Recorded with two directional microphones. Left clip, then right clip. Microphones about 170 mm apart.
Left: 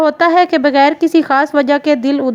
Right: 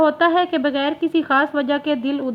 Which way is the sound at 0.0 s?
50° left (ahead or behind).